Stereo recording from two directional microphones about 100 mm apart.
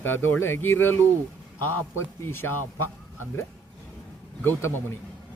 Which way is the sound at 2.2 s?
20° left (ahead or behind).